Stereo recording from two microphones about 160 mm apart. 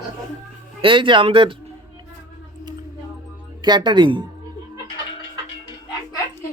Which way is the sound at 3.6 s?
30° right (ahead or behind).